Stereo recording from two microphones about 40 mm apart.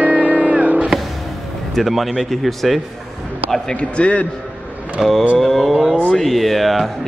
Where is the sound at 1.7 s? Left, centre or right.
Centre.